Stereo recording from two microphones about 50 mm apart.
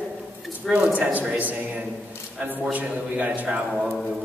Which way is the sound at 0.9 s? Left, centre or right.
Right.